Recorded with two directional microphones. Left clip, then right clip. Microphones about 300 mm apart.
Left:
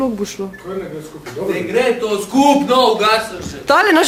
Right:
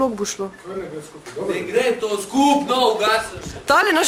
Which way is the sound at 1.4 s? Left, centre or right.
Centre.